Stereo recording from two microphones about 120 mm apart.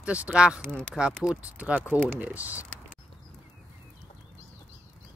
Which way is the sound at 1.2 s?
10° right (ahead or behind).